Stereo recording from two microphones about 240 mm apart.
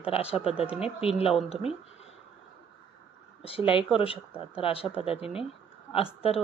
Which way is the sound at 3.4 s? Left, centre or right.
Left.